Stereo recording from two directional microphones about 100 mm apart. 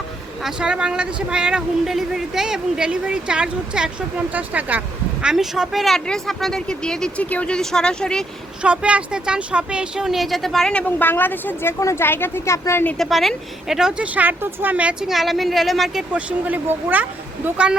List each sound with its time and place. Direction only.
0.4 s speech: 10° right (ahead or behind)
5.2 s speech: 5° right (ahead or behind)
8.6 s speech: 10° right (ahead or behind); by 12.8 s 25° left (ahead or behind)
13.0 s speech: centre (ahead or behind); by 14.9 s 15° right (ahead or behind)
15.0 s speech: centre (ahead or behind)
16.1 s speech: 15° right (ahead or behind)